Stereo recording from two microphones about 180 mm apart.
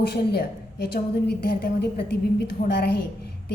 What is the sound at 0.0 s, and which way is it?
A woman's voice, 65° left (ahead or behind).